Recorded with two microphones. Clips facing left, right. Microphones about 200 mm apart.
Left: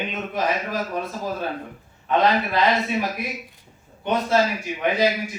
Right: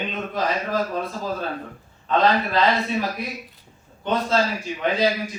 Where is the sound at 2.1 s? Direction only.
15° left (ahead or behind).